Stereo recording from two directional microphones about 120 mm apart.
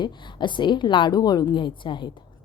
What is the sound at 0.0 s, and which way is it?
A woman's voice, 40° left (ahead or behind).